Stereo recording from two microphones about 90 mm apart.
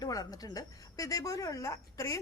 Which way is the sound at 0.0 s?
45° left (ahead or behind).